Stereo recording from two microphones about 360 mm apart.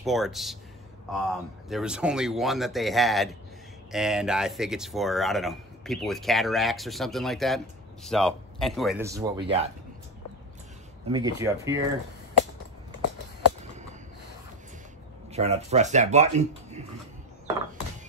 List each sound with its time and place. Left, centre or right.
0.0 s speech: centre
11.1 s speech: centre
15.3 s speech: centre